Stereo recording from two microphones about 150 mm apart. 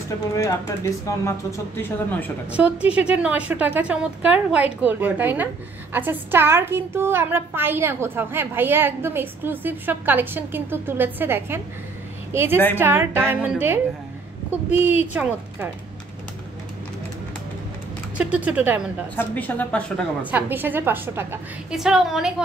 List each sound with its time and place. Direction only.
0.4 s a woman's voice: 20° left (ahead or behind)
2.5 s a woman's voice: 10° right (ahead or behind)
18.1 s a woman's voice: 10° right (ahead or behind)
19.1 s a woman's voice: 10° left (ahead or behind)
20.2 s a woman's voice: 10° right (ahead or behind)
21.6 s a woman's voice: 5° right (ahead or behind)